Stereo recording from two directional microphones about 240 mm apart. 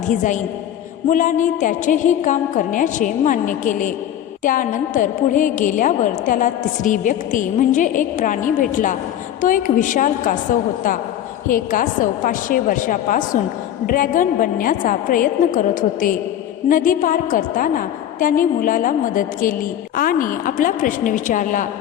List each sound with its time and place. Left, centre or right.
0.1 s a woman's voice: left